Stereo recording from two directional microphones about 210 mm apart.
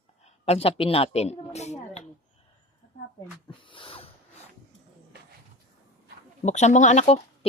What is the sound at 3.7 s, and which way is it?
Snort, 25° left (ahead or behind).